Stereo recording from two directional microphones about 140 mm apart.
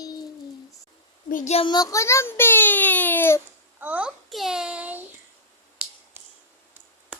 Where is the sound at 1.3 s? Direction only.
70° left (ahead or behind).